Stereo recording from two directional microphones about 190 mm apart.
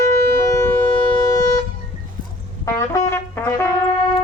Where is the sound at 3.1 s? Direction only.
10° left (ahead or behind).